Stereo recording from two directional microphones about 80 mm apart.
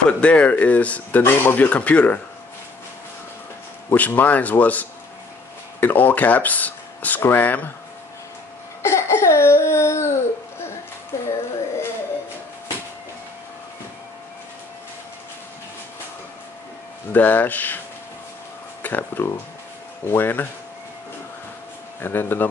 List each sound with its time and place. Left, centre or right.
0.0 s speech: centre
3.9 s speech: left
8.8 s a sound: left
17.1 s speech: left
18.8 s a sound: left
20.1 s speech: left
22.0 s speech: left